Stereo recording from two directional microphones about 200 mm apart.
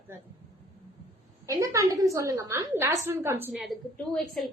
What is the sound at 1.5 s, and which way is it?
A woman's voice, 15° right (ahead or behind).